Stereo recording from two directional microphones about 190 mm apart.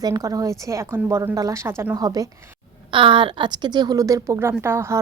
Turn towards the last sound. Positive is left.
turn(degrees=-15)  # may be behind; listen again after turning